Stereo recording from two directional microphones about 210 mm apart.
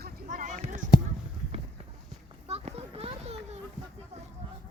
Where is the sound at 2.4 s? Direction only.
30° right (ahead or behind).